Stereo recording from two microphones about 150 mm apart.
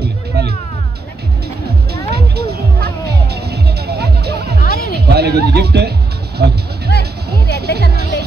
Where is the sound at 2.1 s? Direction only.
90° right.